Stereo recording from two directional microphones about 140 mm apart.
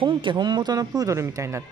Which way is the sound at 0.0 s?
35° right (ahead or behind).